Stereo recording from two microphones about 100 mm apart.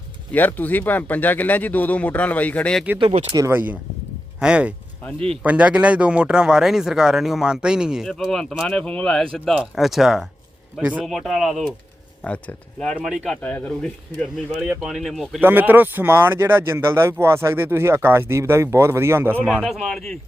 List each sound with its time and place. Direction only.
0.3 s speech: 15° left (ahead or behind)
3.5 s speech: 20° right (ahead or behind)
8.0 s speech: 5° left (ahead or behind)
9.7 s speech: centre (ahead or behind)
10.8 s speech: 15° right (ahead or behind)
11.0 s speech: centre (ahead or behind)
12.2 s speech: 15° left (ahead or behind)
13.0 s speech: 10° right (ahead or behind)
13.4 s speech: 15° left (ahead or behind)
14.6 s speech: 10° right (ahead or behind)
14.8 s speech: centre (ahead or behind)
15.4 s speech: 20° right (ahead or behind)
19.4 s speech: 10° left (ahead or behind)
19.6 s speech: centre (ahead or behind)